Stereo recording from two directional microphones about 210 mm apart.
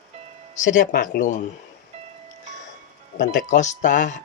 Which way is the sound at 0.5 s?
35° left (ahead or behind).